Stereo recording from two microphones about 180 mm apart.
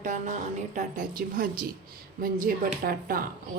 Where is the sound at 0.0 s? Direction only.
45° right (ahead or behind).